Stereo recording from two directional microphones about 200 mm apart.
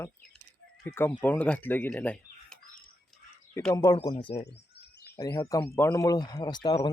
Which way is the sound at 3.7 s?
20° left (ahead or behind).